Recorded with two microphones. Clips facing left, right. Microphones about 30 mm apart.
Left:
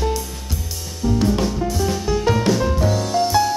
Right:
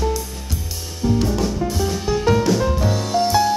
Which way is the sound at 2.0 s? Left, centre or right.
Centre.